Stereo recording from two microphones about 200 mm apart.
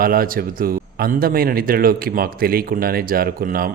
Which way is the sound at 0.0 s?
45° right (ahead or behind).